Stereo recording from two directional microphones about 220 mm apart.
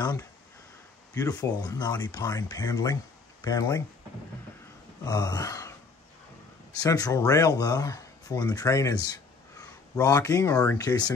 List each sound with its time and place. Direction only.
0.0 s speech: 20° left (ahead or behind)
5.0 s speech: 15° left (ahead or behind)
6.8 s speech: 15° left (ahead or behind)